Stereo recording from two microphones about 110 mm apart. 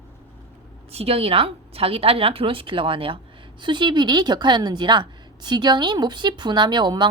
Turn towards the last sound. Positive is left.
turn(degrees=-45)  # may be behind; listen again after turning